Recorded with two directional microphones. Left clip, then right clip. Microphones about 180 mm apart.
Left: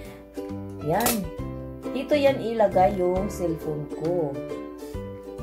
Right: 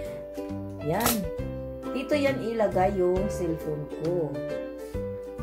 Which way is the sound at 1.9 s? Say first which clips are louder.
Left 5 dB; centre (ahead or behind).